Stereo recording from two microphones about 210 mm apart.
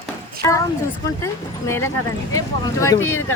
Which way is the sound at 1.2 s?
15° left (ahead or behind).